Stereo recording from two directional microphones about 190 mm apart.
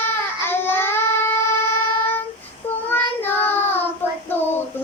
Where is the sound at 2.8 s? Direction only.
10° left (ahead or behind).